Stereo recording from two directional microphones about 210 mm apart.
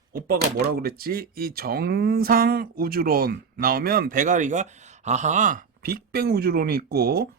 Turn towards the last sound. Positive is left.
turn(degrees=-50)  # may be behind; listen again after turning